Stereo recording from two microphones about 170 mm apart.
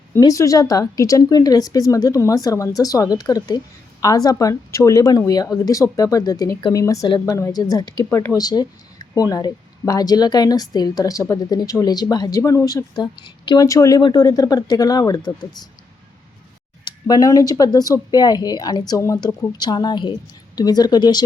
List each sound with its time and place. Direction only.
0.2 s speech: 20° left (ahead or behind)
16.8 s speech: 20° left (ahead or behind)